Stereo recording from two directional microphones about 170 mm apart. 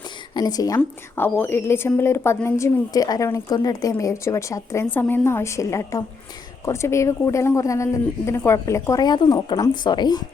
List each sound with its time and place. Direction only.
0.3 s a woman's voice: 25° left (ahead or behind)